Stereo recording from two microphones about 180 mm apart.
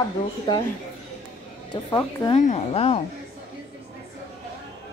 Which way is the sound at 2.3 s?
35° left (ahead or behind).